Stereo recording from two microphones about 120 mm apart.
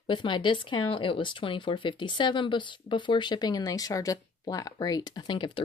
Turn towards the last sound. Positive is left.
turn(degrees=40)  # may be behind; listen again after turning